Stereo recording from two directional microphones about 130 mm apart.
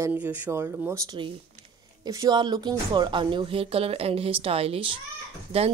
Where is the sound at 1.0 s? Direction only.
40° right (ahead or behind).